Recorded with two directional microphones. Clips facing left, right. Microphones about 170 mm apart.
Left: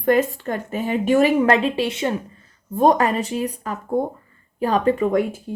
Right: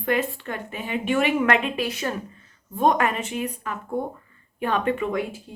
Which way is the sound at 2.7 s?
35° left (ahead or behind).